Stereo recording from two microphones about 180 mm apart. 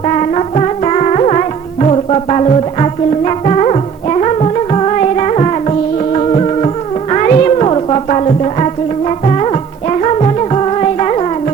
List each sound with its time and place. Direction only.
0.0 s music: 35° left (ahead or behind)